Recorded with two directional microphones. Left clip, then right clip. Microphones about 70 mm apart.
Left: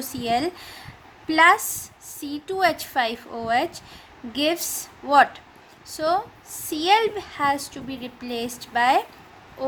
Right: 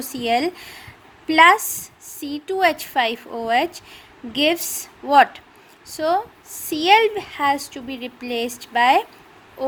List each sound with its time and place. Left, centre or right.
0.1 s speech: right
2.2 s speech: right
6.7 s speech: right